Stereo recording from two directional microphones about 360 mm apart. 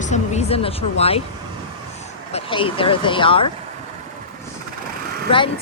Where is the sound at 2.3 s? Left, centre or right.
Centre.